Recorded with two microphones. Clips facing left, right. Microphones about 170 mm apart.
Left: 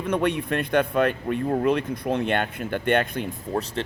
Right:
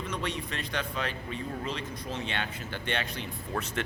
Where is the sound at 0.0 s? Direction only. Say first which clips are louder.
Left 11 dB; 55° left (ahead or behind).